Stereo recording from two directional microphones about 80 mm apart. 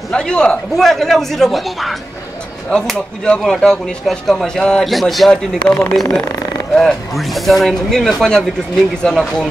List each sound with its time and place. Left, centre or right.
0.1 s a man's voice: centre
5.7 s a man's voice: centre
6.7 s speech: centre